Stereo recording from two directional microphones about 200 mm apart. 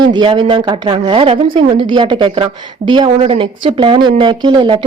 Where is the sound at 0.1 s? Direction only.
20° right (ahead or behind).